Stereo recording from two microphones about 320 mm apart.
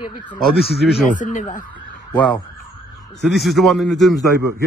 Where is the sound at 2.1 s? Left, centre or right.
Centre.